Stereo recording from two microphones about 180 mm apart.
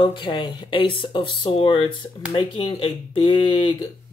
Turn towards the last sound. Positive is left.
turn(degrees=25)  # may be behind; listen again after turning